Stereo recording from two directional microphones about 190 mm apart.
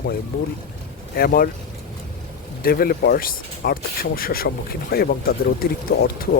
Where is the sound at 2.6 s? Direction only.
50° left (ahead or behind).